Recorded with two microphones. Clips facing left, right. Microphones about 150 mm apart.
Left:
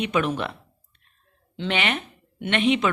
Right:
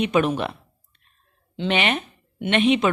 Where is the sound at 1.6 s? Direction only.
20° right (ahead or behind).